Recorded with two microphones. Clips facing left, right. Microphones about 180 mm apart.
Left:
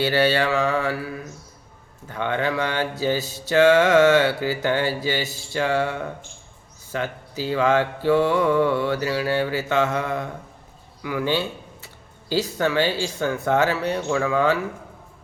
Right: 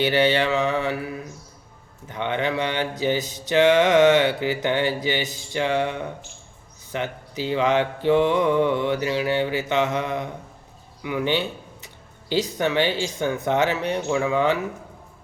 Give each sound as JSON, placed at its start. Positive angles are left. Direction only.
{"t": 0.0, "sound": "mantra", "side_deg": -20}
{"t": 11.0, "sound": "speech", "side_deg": -20}
{"t": 12.3, "sound": "mantra", "side_deg": -20}